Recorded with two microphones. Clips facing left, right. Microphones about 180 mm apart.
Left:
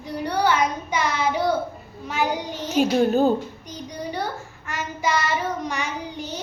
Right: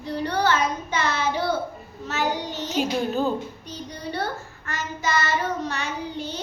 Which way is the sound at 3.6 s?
15° left (ahead or behind).